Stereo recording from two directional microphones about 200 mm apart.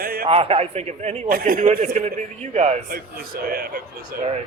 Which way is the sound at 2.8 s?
50° right (ahead or behind).